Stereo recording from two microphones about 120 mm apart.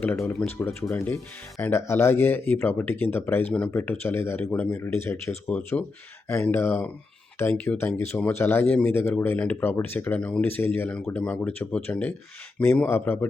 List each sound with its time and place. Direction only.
0.5 s speech: 20° left (ahead or behind)